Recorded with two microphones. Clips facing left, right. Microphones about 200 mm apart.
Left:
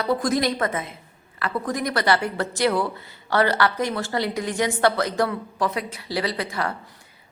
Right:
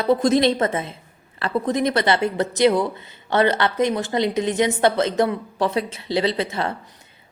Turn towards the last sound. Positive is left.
turn(degrees=-25)  # may be behind; listen again after turning